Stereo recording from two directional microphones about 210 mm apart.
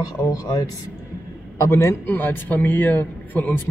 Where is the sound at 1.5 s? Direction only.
15° left (ahead or behind).